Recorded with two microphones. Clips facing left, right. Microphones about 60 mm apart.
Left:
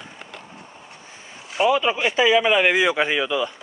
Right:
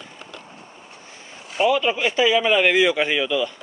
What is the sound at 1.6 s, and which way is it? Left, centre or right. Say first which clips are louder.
A man's voice: even; centre.